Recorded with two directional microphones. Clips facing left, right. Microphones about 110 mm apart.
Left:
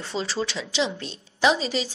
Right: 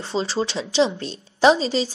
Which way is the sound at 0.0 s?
30° right (ahead or behind).